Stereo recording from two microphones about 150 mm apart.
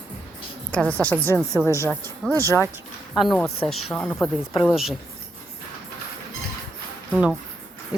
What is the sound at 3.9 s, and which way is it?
Speech, 15° left (ahead or behind).